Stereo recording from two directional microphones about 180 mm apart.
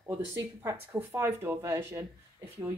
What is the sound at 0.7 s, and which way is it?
A woman's voice, 15° right (ahead or behind).